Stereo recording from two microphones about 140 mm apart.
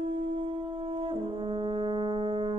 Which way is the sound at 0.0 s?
40° right (ahead or behind).